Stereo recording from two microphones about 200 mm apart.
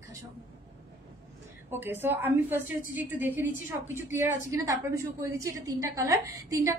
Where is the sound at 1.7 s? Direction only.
10° right (ahead or behind).